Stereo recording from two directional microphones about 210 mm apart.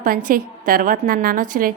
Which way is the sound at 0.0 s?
40° right (ahead or behind).